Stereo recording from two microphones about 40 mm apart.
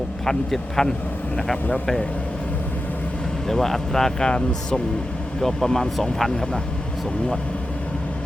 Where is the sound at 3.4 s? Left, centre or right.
Centre.